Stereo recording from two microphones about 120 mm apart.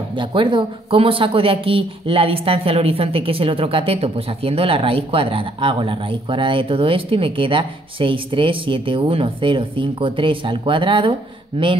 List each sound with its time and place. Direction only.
0.1 s speech: 45° right (ahead or behind)